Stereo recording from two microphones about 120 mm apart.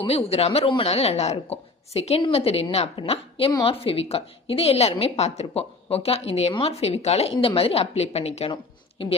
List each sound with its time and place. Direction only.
0.1 s a woman's voice: 55° left (ahead or behind)
9.0 s a woman's voice: 50° left (ahead or behind)